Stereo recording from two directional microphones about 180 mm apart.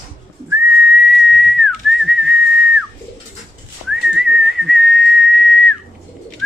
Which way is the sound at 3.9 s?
5° right (ahead or behind).